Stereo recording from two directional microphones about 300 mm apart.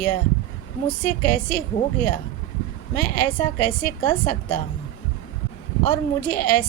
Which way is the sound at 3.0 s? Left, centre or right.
Left.